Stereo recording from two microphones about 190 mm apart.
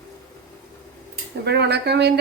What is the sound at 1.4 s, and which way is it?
Speech, 60° right (ahead or behind).